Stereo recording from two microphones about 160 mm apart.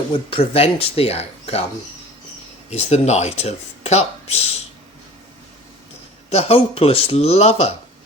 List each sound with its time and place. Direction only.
0.1 s speech: 35° left (ahead or behind)
2.6 s speech: 45° left (ahead or behind)
6.3 s speech: 35° left (ahead or behind)